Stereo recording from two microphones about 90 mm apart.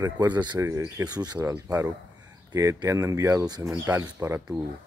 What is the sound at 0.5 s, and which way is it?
Speech, 30° right (ahead or behind).